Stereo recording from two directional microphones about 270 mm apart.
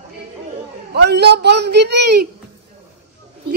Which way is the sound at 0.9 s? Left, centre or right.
Right.